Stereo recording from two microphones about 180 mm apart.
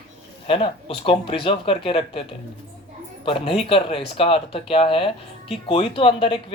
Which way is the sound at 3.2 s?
30° left (ahead or behind).